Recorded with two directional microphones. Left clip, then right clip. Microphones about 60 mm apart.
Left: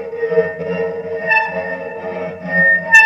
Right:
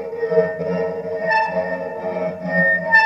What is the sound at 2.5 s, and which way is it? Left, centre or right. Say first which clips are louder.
Music: left 5 dB; right.